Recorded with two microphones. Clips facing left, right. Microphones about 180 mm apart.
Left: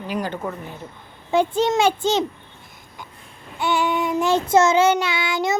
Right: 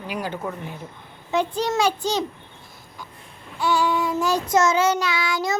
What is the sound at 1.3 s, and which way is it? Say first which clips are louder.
Speech: left 4 dB; 30° left (ahead or behind).